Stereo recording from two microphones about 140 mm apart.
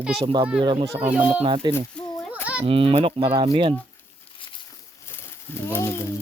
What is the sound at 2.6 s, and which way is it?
Livestock, 40° right (ahead or behind).